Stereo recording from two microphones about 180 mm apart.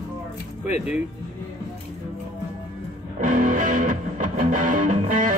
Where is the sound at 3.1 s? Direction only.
45° right (ahead or behind).